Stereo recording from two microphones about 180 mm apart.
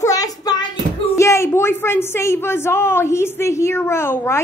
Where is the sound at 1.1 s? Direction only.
15° left (ahead or behind).